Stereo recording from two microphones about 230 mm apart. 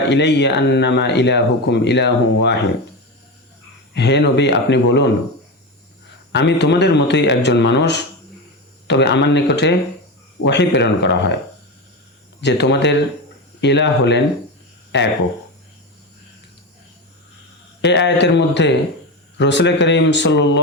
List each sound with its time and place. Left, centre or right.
0.1 s speech: left
3.9 s speech: left
6.3 s speech: left
12.4 s speech: left
17.8 s speech: left